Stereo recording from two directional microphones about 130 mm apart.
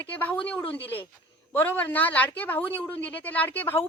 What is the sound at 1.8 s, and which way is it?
Speech, 15° left (ahead or behind).